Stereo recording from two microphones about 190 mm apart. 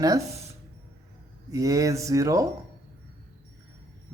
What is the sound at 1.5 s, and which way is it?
Speech, 20° right (ahead or behind).